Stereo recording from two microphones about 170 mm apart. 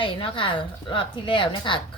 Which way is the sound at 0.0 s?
30° left (ahead or behind).